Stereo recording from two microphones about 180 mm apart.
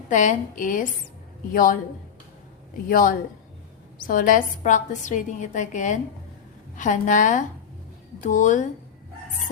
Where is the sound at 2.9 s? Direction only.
50° left (ahead or behind).